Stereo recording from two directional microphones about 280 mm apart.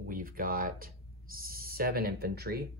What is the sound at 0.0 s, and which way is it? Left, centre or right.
Speech, right.